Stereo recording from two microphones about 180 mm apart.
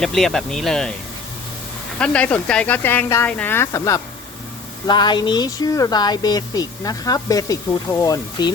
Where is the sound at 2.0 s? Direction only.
5° left (ahead or behind).